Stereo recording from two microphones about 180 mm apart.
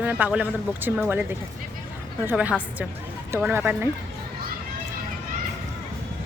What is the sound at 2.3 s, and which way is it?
Speech, 10° right (ahead or behind).